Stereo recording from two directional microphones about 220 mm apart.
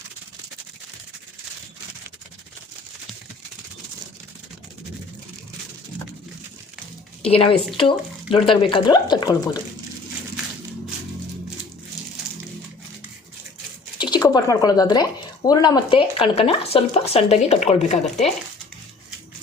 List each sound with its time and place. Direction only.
7.3 s speech: 25° left (ahead or behind)
14.0 s speech: 20° left (ahead or behind)